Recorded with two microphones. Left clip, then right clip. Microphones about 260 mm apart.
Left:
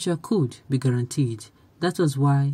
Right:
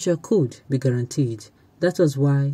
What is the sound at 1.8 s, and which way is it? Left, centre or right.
Speech, centre.